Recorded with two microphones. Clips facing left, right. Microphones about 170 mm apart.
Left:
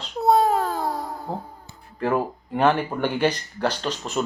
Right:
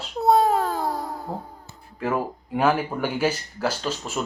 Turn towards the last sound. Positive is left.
turn(degrees=-5)  # may be behind; listen again after turning